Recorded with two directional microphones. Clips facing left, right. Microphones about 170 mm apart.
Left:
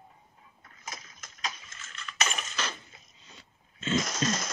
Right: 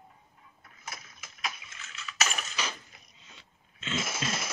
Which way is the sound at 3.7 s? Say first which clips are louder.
Left 6 dB; 40° left (ahead or behind).